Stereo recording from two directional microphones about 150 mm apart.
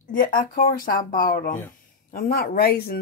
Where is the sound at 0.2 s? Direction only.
70° left (ahead or behind).